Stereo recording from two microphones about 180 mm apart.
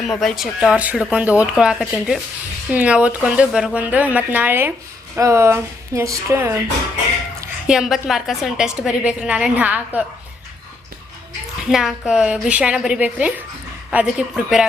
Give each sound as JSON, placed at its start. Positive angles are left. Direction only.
{"t": 0.0, "sound": "speech", "side_deg": 0}
{"t": 7.7, "sound": "speech", "side_deg": 0}
{"t": 11.7, "sound": "speech", "side_deg": 0}